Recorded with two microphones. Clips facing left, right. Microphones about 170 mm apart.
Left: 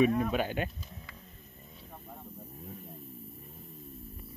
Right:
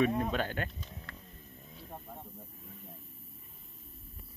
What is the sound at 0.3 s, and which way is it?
Speech, 15° left (ahead or behind).